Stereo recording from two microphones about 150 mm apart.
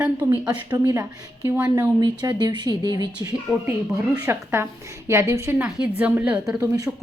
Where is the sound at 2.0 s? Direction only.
30° right (ahead or behind).